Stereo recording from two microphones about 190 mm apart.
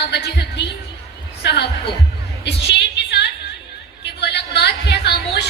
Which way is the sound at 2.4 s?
65° left (ahead or behind).